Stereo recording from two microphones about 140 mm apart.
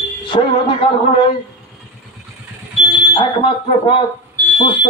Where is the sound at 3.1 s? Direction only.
40° left (ahead or behind).